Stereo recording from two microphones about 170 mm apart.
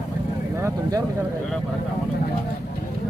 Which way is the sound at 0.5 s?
20° right (ahead or behind).